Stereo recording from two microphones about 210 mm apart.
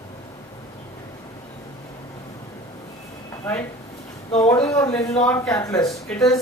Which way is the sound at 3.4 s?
10° left (ahead or behind).